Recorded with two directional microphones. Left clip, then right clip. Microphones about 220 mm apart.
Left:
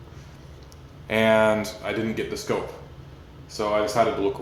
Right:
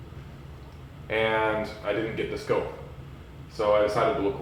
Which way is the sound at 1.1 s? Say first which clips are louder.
Left 5 dB; 50° left (ahead or behind).